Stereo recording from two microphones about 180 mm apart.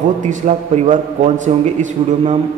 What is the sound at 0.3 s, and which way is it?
A man's voice, 45° right (ahead or behind).